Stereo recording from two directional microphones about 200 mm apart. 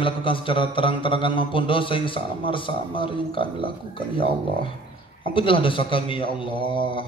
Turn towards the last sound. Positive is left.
turn(degrees=25)  # may be behind; listen again after turning